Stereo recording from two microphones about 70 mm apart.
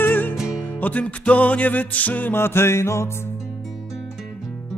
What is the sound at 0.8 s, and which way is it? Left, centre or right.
Music, left.